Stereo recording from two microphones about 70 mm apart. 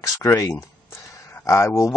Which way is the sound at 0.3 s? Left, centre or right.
Left.